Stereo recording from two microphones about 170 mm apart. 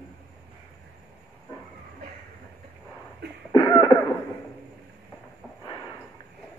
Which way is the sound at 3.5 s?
20° left (ahead or behind).